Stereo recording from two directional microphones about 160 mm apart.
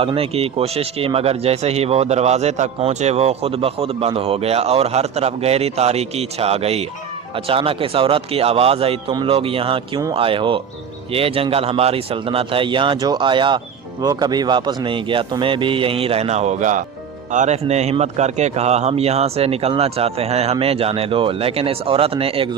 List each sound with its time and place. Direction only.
0.0 s speech: 35° right (ahead or behind)